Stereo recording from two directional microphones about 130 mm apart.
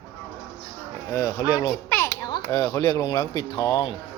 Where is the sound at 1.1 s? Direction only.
25° left (ahead or behind).